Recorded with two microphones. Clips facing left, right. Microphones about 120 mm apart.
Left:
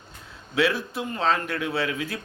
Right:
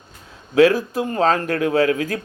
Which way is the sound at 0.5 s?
40° right (ahead or behind).